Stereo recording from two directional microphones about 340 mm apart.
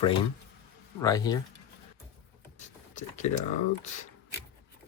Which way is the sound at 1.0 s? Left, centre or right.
Centre.